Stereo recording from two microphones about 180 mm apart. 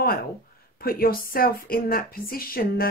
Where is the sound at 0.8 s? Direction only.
55° left (ahead or behind).